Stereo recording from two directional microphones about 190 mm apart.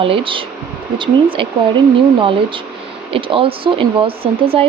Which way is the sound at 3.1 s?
30° right (ahead or behind).